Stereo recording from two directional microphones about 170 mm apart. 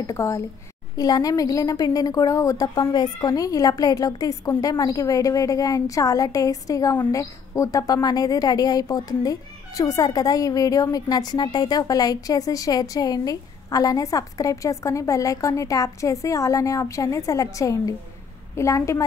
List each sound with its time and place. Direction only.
0.0 s a woman's voice: 20° left (ahead or behind)